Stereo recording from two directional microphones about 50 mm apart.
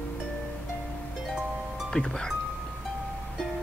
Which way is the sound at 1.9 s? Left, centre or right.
Centre.